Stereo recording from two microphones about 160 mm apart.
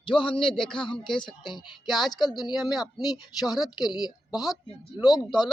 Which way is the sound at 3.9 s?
25° left (ahead or behind).